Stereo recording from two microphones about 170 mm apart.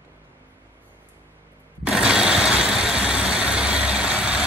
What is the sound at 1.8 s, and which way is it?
Vehicle, 5° right (ahead or behind).